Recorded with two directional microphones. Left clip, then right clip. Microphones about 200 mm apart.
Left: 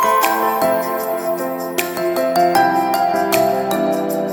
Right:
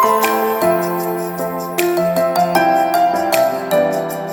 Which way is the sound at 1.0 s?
Centre (ahead or behind).